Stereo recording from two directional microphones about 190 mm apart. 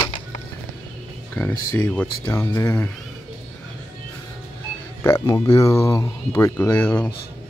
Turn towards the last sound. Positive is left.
turn(degrees=10)  # may be behind; listen again after turning